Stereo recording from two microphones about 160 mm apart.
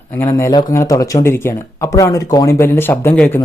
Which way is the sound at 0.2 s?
15° left (ahead or behind).